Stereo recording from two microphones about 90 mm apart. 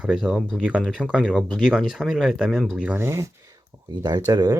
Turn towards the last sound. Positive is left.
turn(degrees=-45)  # may be behind; listen again after turning